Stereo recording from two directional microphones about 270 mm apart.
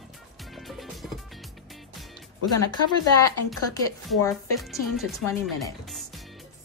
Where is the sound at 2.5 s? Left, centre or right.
Centre.